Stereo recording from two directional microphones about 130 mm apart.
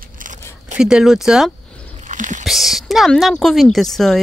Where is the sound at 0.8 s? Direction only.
5° right (ahead or behind).